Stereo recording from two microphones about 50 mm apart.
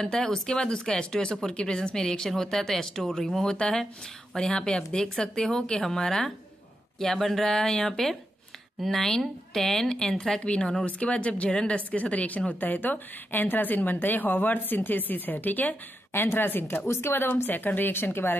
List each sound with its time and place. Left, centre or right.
0.1 s speech: centre
3.4 s speech: centre
10.4 s speech: left
16.1 s speech: left